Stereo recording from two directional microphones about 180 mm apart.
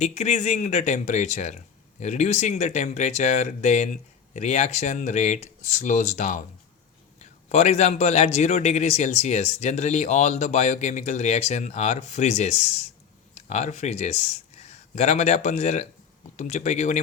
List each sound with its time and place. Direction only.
0.0 s a man's voice: 40° left (ahead or behind)